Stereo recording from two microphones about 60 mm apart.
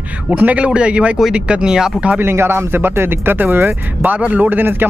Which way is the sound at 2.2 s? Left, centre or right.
Right.